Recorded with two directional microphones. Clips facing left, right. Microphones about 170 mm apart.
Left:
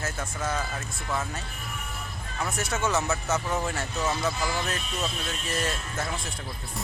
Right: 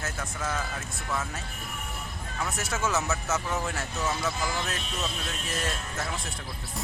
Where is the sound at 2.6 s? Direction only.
Centre (ahead or behind).